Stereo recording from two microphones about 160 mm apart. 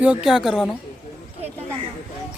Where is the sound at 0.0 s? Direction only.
5° right (ahead or behind).